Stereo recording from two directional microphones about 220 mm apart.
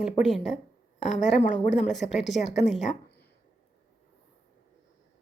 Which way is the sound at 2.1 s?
Centre (ahead or behind).